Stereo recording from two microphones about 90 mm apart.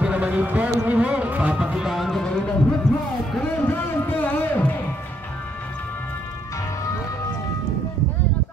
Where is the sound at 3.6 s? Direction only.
25° left (ahead or behind).